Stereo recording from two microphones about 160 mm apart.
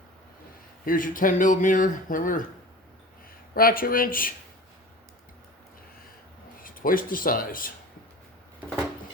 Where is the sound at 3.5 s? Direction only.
65° left (ahead or behind).